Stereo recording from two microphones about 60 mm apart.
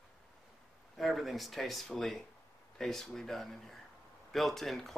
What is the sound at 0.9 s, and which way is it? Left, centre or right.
Speech, centre.